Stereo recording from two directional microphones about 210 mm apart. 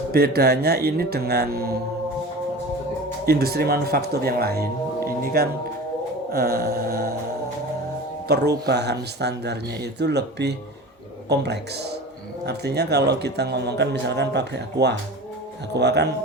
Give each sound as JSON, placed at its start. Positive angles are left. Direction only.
{"t": 0.1, "sound": "a man's voice", "side_deg": -45}
{"t": 3.2, "sound": "a man's voice", "side_deg": -50}
{"t": 5.0, "sound": "singing bowl", "side_deg": -45}
{"t": 6.3, "sound": "a man's voice", "side_deg": -45}
{"t": 8.3, "sound": "a man's voice", "side_deg": -50}